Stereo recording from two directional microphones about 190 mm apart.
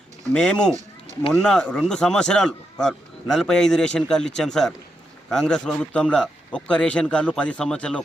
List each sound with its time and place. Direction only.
0.3 s a man's voice: 5° left (ahead or behind)